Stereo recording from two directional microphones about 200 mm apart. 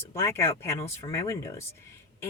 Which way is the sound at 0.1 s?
15° left (ahead or behind).